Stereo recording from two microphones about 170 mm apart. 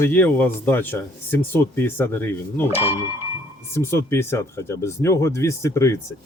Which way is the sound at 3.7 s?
15° left (ahead or behind).